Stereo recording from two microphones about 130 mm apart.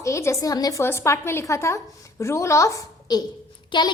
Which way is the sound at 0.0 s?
25° left (ahead or behind).